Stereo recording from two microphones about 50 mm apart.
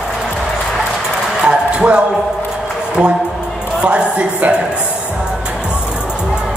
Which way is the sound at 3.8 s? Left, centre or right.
Right.